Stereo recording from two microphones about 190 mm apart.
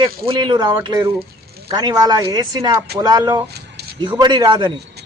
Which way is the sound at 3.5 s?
60° right (ahead or behind).